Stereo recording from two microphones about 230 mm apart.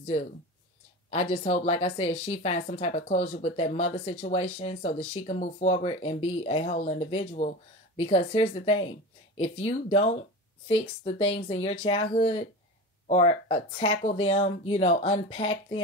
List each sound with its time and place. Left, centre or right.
1.3 s speech: left